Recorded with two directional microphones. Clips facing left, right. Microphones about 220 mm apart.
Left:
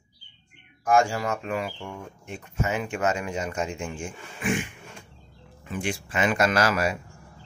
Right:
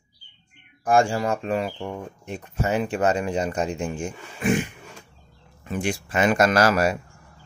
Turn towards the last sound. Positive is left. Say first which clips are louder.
# right 4 dB
turn(degrees=-40)  # may be behind; listen again after turning